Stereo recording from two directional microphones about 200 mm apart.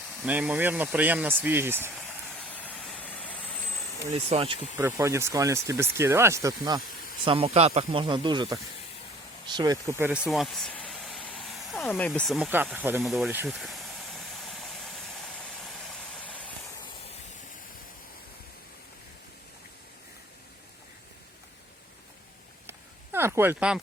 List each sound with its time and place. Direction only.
0.2 s speech: 5° right (ahead or behind)
2.5 s vehicle: 5° left (ahead or behind)
4.1 s speech: 30° right (ahead or behind)
4.8 s speech: 15° right (ahead or behind)
7.3 s speech: 30° right (ahead or behind)
9.6 s speech: 15° right (ahead or behind)
13.5 s a sound: centre (ahead or behind)
23.1 s speech: 10° right (ahead or behind)